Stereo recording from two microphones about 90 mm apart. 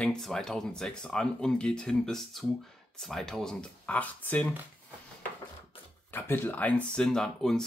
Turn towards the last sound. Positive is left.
turn(degrees=5)  # may be behind; listen again after turning